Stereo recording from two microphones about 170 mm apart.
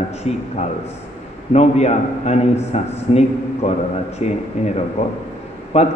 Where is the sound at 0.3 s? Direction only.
40° left (ahead or behind).